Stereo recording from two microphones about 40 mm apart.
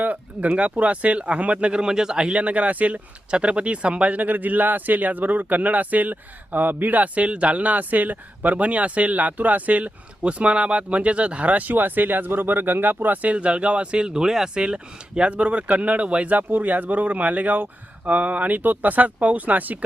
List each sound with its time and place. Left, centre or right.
0.0 s a sound: right
0.5 s speech: right
3.2 s speech: right
13.2 s speech: right
16.4 s speech: right